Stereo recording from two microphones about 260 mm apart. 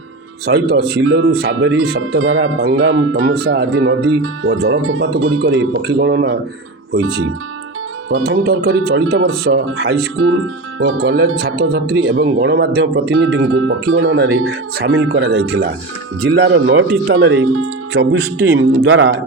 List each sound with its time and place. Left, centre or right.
0.4 s speech: right
8.1 s speech: right
10.2 s speech: right
11.0 s speech: right
16.3 s speech: right